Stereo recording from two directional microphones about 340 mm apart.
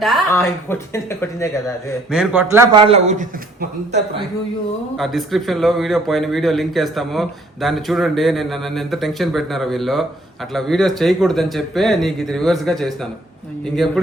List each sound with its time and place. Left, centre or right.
0.0 s a woman's voice: centre
2.0 s speech: centre; by 4.2 s right
4.9 s a man's voice: centre